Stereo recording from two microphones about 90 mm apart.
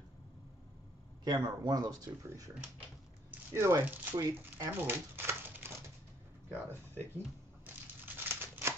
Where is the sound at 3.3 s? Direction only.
25° right (ahead or behind).